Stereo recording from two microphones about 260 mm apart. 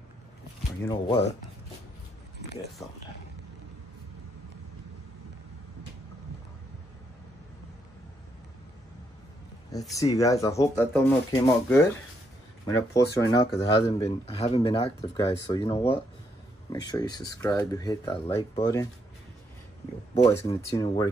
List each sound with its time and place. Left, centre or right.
0.8 s speech: centre
9.7 s speech: centre
20.4 s speech: centre